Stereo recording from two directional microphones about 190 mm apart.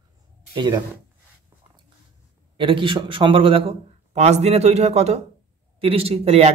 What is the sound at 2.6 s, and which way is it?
Speech, 25° right (ahead or behind).